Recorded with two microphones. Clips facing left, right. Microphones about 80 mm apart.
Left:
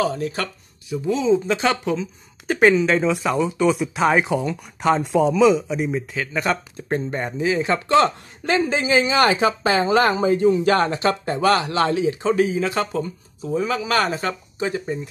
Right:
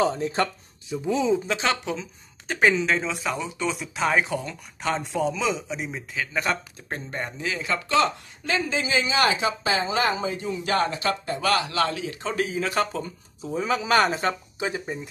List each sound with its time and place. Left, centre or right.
0.3 s a sound: right
1.0 s speech: right
1.5 s speech: centre
7.1 s speech: centre; by 10.1 s left
10.1 s speech: left
12.2 s speech: centre